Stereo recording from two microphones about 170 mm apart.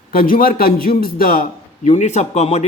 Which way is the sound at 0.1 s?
55° left (ahead or behind).